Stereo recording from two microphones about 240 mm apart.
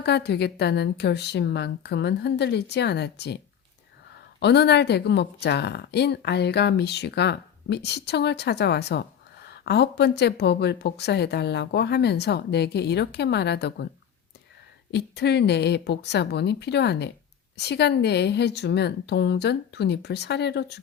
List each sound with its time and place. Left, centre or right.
0.0 s speech: left
4.4 s speech: left
14.9 s speech: left